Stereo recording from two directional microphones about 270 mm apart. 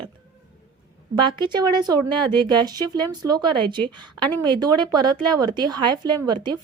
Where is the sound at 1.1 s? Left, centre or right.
Centre.